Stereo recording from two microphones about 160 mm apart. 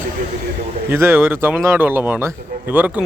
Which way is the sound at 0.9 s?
15° right (ahead or behind).